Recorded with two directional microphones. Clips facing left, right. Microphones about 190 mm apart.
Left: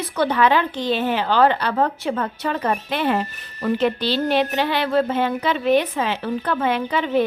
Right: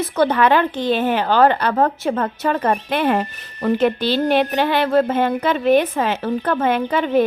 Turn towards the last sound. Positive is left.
turn(degrees=-50)  # may be behind; listen again after turning